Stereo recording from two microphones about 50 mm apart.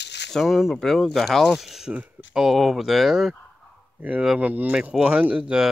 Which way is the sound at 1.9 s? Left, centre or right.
Right.